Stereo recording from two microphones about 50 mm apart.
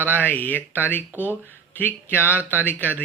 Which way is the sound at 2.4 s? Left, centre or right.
Right.